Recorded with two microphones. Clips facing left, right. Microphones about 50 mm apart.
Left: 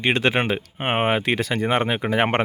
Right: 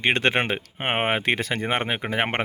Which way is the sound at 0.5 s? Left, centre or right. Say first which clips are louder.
Left 2 dB; right.